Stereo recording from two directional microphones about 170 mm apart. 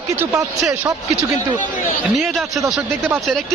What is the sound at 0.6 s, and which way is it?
A man's voice, 5° right (ahead or behind).